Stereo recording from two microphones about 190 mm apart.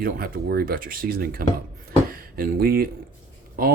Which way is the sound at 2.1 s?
50° right (ahead or behind).